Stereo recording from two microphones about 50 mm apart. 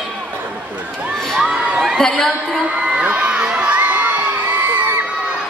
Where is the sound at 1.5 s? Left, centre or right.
Right.